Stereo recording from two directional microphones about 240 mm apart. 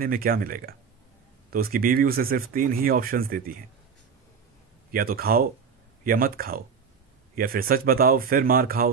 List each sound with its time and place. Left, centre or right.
0.0 s speech: right
4.9 s speech: right